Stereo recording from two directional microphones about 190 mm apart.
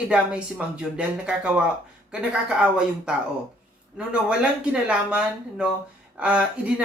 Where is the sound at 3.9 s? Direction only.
5° right (ahead or behind).